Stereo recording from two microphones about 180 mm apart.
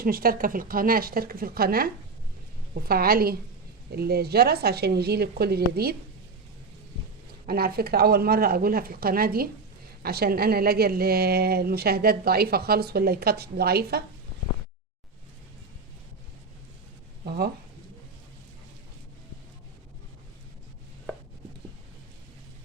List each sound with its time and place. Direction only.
0.0 s speech: 55° right (ahead or behind)
7.4 s speech: 55° right (ahead or behind)
17.2 s speech: 60° right (ahead or behind)